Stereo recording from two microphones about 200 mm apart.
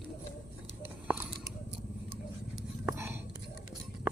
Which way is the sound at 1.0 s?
10° right (ahead or behind).